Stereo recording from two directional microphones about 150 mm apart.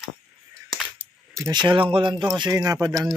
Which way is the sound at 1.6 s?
35° right (ahead or behind).